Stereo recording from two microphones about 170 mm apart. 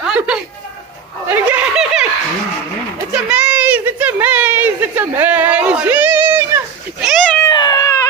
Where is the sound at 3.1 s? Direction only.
5° right (ahead or behind).